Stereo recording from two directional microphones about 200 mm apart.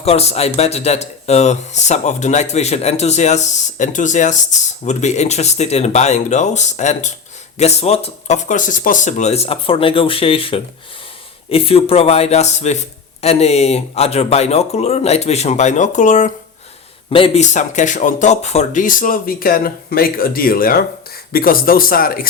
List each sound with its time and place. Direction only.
0.0 s speech: 30° left (ahead or behind)
17.1 s speech: 25° left (ahead or behind); by 22.3 s 45° left (ahead or behind)